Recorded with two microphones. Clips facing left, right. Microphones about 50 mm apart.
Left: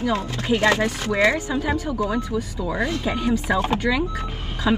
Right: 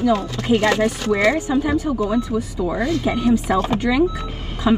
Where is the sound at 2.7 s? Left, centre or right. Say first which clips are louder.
Right 3 dB; left.